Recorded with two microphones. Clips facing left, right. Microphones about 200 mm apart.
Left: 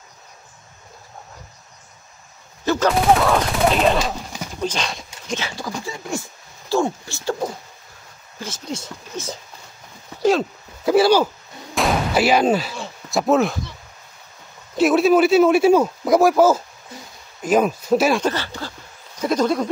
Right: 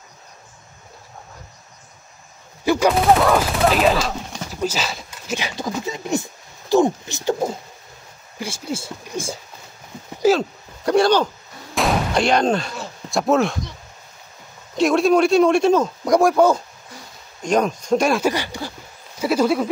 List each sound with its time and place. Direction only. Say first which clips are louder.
2.6 s gunshot: right 2 dB; 10° right (ahead or behind)
2.9 s speech: even; centre (ahead or behind)
4.5 s dog: right 1 dB; 5° right (ahead or behind)
5.8 s speech: right 6 dB; 20° right (ahead or behind)
6.7 s a sound: right 4 dB; 20° right (ahead or behind)
8.4 s speech: right 2 dB; 10° right (ahead or behind)
10.2 s speech: right 1 dB; centre (ahead or behind)
11.7 s gunshot: even; centre (ahead or behind)
14.8 s speech: left 1 dB; 5° left (ahead or behind)
18.2 s speech: right 2 dB; 15° right (ahead or behind)
19.1 s a sound: right 1 dB; 10° right (ahead or behind)